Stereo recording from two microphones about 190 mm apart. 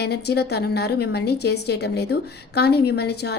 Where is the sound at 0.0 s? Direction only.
60° left (ahead or behind).